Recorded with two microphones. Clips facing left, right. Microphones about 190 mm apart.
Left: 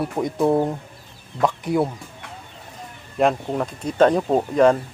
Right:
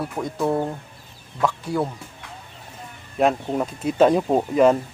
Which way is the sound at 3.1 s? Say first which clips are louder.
Even; 5° right (ahead or behind).